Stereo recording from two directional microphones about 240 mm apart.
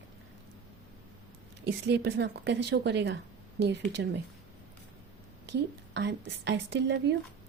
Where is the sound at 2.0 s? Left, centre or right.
Right.